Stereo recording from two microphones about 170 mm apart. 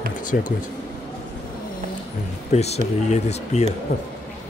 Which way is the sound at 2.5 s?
40° left (ahead or behind).